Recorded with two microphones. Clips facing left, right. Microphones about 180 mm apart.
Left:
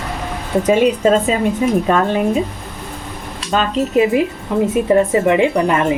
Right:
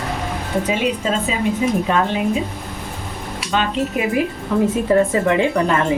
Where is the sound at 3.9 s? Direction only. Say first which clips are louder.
Left 6 dB; 25° left (ahead or behind).